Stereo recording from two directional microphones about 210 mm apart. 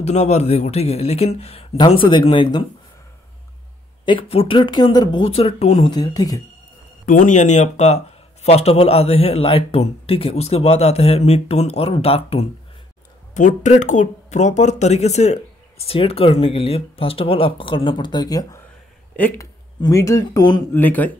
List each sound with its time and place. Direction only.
0.0 s speech: 30° left (ahead or behind)
4.0 s speech: 25° left (ahead or behind)
5.9 s speech: 20° left (ahead or behind)
7.1 s speech: 40° left (ahead or behind); by 20.6 s 20° left (ahead or behind)
20.7 s speech: 10° left (ahead or behind)